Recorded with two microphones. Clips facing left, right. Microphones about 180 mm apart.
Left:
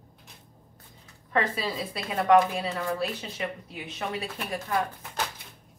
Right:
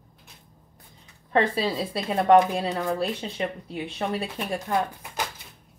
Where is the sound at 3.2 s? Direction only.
30° right (ahead or behind).